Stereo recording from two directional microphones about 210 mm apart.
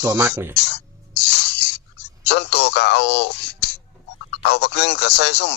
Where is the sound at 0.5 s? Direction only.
55° left (ahead or behind).